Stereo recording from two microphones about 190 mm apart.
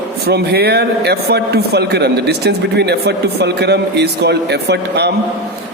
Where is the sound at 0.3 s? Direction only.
60° right (ahead or behind).